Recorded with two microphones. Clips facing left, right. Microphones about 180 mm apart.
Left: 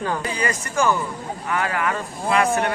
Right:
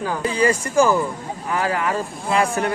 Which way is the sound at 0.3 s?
30° right (ahead or behind).